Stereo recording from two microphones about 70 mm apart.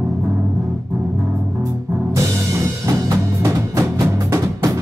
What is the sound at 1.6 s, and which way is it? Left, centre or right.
Music, right.